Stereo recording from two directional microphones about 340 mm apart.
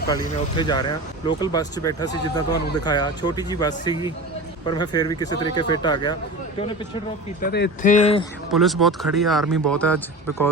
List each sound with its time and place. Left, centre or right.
0.1 s speech: centre
7.4 s speech: left
8.4 s speech: centre